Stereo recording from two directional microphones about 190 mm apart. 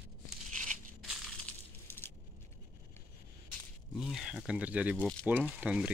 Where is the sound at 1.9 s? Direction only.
10° left (ahead or behind).